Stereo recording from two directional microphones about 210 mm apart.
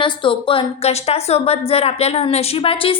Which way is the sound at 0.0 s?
25° left (ahead or behind).